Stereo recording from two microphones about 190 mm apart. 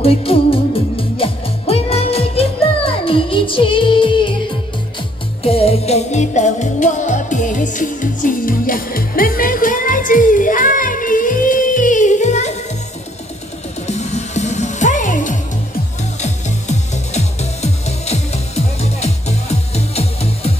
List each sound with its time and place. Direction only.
0.0 s music: 30° left (ahead or behind)
13.8 s music: 35° left (ahead or behind)